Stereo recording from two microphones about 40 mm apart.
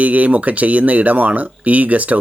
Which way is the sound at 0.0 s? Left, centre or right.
Right.